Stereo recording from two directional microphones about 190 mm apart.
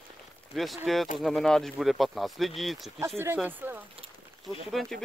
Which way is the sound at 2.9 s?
15° right (ahead or behind).